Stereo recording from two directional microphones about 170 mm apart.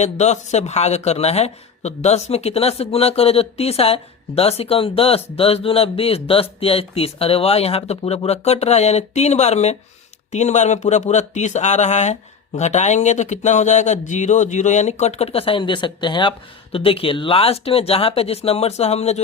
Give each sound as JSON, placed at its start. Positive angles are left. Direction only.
{"t": 0.0, "sound": "speech", "side_deg": 40}